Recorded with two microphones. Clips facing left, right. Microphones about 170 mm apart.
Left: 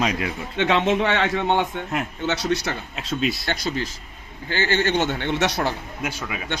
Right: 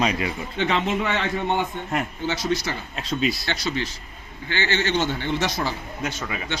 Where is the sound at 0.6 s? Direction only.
75° left (ahead or behind).